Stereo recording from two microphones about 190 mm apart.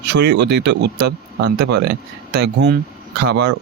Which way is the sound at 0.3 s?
65° right (ahead or behind).